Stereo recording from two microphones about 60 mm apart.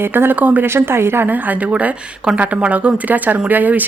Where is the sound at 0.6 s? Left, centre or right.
Right.